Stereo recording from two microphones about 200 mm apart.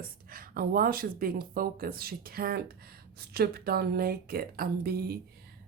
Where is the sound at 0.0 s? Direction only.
45° right (ahead or behind).